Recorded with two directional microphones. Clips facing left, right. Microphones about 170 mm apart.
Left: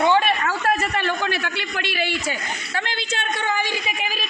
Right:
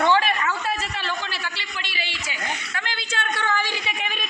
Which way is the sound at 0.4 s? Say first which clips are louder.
Left 4 dB; 50° left (ahead or behind).